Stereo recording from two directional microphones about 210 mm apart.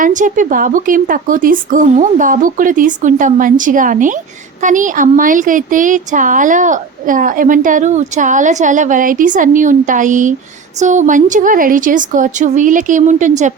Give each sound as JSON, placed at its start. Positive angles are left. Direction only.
{"t": 0.0, "sound": "speech", "side_deg": -40}